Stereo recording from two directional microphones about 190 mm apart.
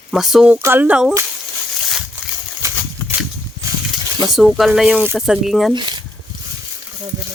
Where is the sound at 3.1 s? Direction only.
10° right (ahead or behind).